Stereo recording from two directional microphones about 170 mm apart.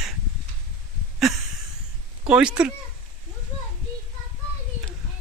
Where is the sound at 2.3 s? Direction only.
5° right (ahead or behind).